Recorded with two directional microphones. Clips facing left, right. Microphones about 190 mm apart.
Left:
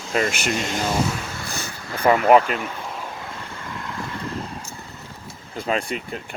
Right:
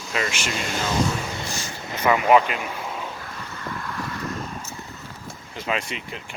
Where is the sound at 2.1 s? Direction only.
40° left (ahead or behind).